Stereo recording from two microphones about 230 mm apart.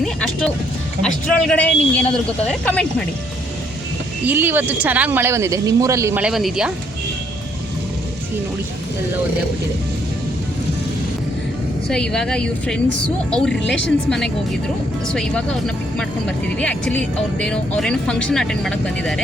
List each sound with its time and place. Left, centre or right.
0.0 s speech: centre
4.3 s speech: centre
11.9 s speech: centre